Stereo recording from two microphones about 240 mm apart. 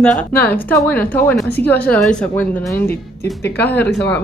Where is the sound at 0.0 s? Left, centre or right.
Centre.